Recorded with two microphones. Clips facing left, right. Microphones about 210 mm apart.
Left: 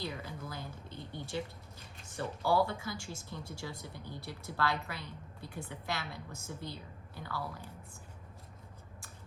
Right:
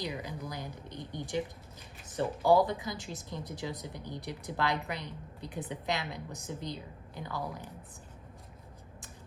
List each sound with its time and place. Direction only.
0.0 s a woman's voice: 15° right (ahead or behind)